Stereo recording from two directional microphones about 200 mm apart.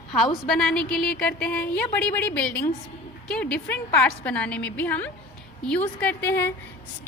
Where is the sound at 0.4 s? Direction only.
5° left (ahead or behind).